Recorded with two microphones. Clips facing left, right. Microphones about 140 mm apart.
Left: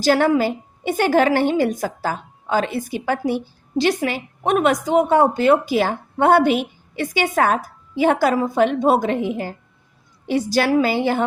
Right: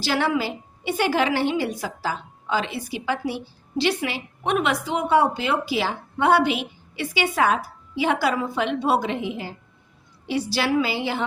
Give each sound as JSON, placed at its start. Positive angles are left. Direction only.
{"t": 0.0, "sound": "a woman's voice", "side_deg": 45}